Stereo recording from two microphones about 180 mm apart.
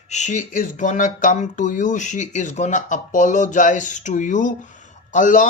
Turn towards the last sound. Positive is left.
turn(degrees=45)  # may be behind; listen again after turning